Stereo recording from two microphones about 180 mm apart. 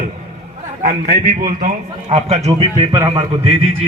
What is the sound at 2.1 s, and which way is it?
Speech, 35° right (ahead or behind).